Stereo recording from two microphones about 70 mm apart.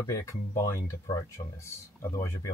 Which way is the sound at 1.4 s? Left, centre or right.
Left.